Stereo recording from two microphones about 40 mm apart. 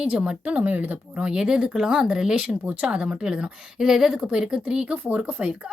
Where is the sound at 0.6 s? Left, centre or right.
Right.